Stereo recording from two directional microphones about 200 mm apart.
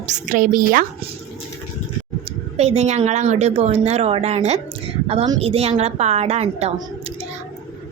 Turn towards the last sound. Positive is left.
turn(degrees=-35)  # may be behind; listen again after turning